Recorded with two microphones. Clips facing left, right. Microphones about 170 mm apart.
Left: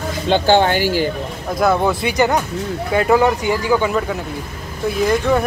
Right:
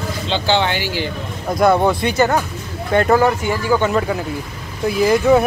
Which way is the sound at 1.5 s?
Centre (ahead or behind).